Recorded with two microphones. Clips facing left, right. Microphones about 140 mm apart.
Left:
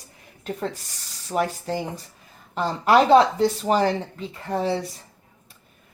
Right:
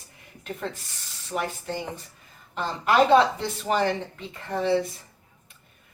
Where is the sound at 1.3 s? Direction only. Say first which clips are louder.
Left 5 dB; 40° left (ahead or behind).